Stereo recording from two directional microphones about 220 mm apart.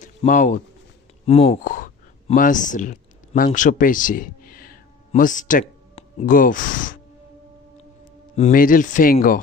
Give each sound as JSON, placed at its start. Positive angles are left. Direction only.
{"t": 0.0, "sound": "speech", "side_deg": 35}
{"t": 8.4, "sound": "speech", "side_deg": 40}